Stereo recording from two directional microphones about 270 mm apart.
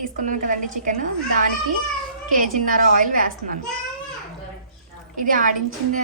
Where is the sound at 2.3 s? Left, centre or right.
Right.